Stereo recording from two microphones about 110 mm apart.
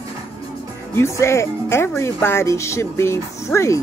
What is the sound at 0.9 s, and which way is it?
Speech, 25° left (ahead or behind).